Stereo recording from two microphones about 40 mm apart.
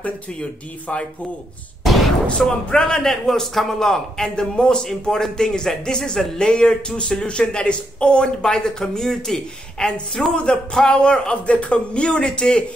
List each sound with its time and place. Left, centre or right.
1.9 s a sound: centre
2.2 s a man's voice: centre
9.8 s speech: left